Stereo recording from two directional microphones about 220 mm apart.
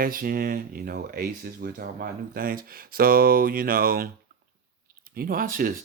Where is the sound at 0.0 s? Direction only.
40° right (ahead or behind).